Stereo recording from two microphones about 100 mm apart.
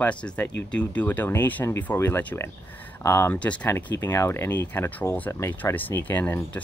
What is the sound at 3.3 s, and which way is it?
Speech, 15° left (ahead or behind).